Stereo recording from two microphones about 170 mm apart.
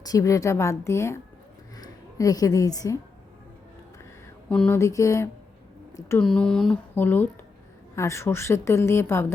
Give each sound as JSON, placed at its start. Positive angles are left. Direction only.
{"t": 0.0, "sound": "a woman's voice", "side_deg": 20}
{"t": 4.4, "sound": "speech", "side_deg": 10}
{"t": 4.8, "sound": "a sound", "side_deg": 20}
{"t": 6.0, "sound": "a woman's voice", "side_deg": 15}
{"t": 6.2, "sound": "a woman's voice", "side_deg": 5}